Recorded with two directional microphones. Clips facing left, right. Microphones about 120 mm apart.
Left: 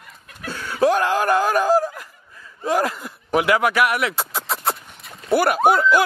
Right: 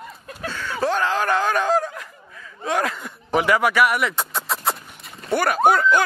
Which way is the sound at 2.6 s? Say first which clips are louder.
Left 2 dB; 5° left (ahead or behind).